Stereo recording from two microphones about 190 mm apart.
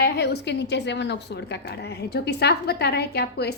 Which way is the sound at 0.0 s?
60° left (ahead or behind).